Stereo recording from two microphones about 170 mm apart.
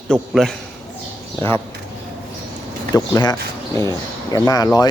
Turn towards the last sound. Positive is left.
turn(degrees=20)  # may be behind; listen again after turning